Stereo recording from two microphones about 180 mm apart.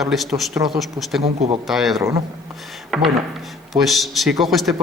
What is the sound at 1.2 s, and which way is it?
Speech, 30° right (ahead or behind).